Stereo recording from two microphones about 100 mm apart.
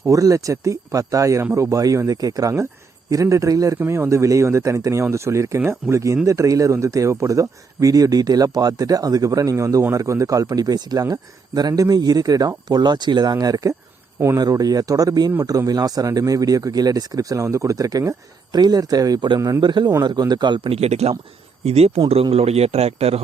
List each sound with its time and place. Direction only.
0.0 s speech: 35° right (ahead or behind)
14.2 s speech: 25° right (ahead or behind)
14.4 s speech: 40° right (ahead or behind)
19.4 s speech: 35° right (ahead or behind)
19.6 s a man's voice: 50° right (ahead or behind)
20.7 s speech: 90° right